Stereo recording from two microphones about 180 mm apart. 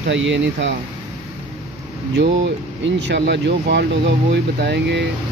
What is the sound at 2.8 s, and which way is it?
Speech, 75° right (ahead or behind).